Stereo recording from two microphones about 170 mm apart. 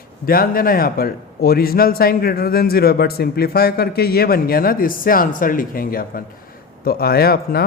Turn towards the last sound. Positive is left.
turn(degrees=65)  # may be behind; listen again after turning